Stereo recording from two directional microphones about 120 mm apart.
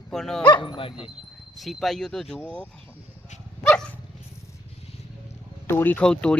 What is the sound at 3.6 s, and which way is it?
Dog, 5° left (ahead or behind).